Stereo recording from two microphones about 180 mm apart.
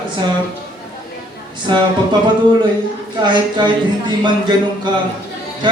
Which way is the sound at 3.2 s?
25° right (ahead or behind).